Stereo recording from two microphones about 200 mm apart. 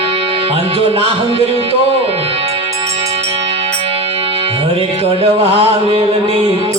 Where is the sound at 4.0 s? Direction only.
30° right (ahead or behind).